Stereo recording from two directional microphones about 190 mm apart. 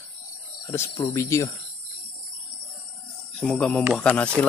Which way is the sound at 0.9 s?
20° left (ahead or behind).